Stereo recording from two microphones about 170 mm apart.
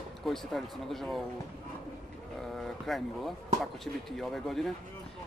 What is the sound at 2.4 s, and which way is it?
Speech, centre (ahead or behind).